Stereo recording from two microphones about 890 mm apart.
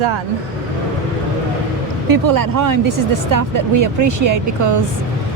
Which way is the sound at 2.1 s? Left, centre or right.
Right.